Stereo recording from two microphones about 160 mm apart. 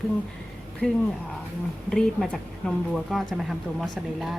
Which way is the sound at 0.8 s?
5° left (ahead or behind).